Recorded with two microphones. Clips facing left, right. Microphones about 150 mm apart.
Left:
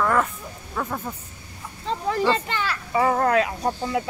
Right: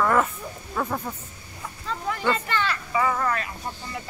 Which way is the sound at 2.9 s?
45° left (ahead or behind).